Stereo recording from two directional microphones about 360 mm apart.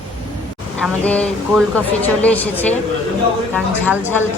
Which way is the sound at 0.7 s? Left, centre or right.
Centre.